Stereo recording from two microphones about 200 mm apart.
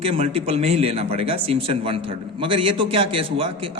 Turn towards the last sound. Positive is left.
turn(degrees=-25)  # may be behind; listen again after turning